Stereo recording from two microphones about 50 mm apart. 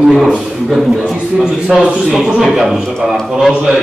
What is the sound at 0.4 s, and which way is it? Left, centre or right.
Speech, centre.